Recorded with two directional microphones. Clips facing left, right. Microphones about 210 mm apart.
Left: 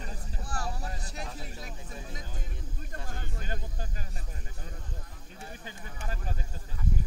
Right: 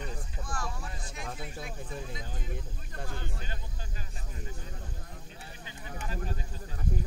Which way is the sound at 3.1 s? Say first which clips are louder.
Left 1 dB; 45° left (ahead or behind).